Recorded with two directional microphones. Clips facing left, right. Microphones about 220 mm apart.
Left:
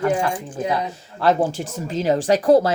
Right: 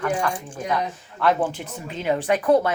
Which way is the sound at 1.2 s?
40° left (ahead or behind).